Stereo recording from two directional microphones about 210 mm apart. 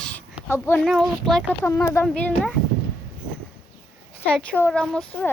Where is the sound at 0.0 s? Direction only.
5° left (ahead or behind).